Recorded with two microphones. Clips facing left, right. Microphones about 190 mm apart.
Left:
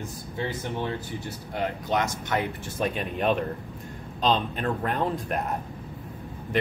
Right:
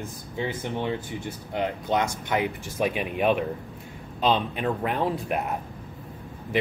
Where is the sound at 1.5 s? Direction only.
20° right (ahead or behind).